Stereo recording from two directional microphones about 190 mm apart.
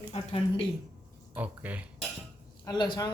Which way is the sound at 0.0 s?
30° left (ahead or behind).